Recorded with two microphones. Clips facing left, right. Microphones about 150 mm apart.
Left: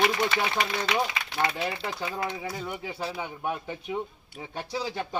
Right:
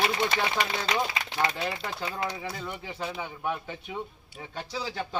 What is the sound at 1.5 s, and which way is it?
A man's voice, 15° left (ahead or behind).